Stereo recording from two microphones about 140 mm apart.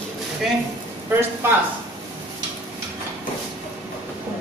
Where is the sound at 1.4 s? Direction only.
15° right (ahead or behind).